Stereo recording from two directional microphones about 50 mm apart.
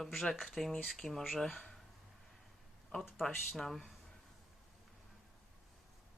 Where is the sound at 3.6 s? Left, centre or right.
Centre.